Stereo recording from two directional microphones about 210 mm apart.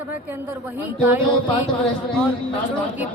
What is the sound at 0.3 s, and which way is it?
Speech, 10° right (ahead or behind).